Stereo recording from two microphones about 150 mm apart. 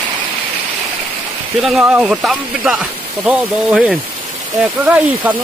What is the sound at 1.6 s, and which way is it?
Speech, 5° right (ahead or behind).